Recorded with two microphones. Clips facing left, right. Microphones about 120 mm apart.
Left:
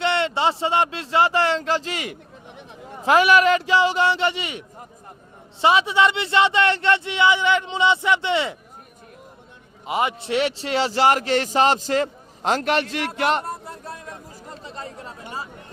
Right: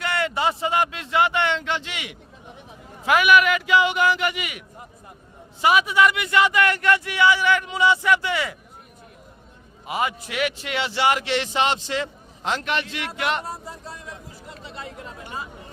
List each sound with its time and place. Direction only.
0.0 s a man's voice: 25° left (ahead or behind)
9.8 s a man's voice: 25° left (ahead or behind)
13.4 s a sound: 55° left (ahead or behind); by 15.4 s 35° left (ahead or behind)